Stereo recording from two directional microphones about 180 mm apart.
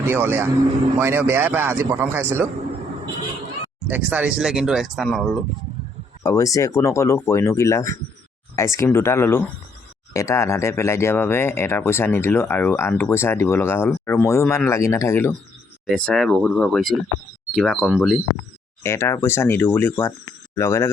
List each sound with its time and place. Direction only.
0.0 s a man's voice: 10° right (ahead or behind)
3.8 s speech: 10° right (ahead or behind)
6.2 s speech: 20° left (ahead or behind); by 18.2 s centre (ahead or behind)
18.8 s speech: 15° left (ahead or behind)